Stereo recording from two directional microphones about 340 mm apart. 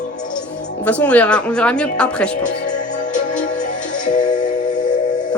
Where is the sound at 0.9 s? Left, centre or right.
Centre.